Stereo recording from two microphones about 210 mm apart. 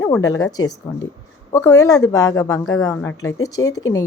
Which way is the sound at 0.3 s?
15° left (ahead or behind).